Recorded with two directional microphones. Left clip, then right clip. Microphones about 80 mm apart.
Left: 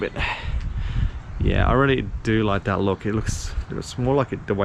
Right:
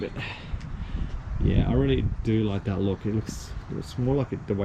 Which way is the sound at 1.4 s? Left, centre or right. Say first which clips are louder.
Left 7 dB; right.